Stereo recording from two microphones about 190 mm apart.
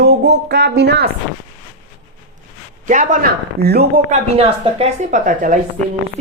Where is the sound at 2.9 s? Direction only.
45° right (ahead or behind).